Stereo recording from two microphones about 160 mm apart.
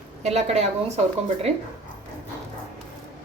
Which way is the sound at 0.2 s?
40° right (ahead or behind).